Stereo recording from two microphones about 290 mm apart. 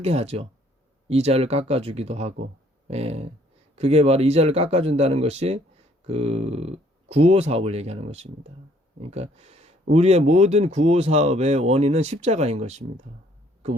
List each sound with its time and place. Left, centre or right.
0.0 s speech: right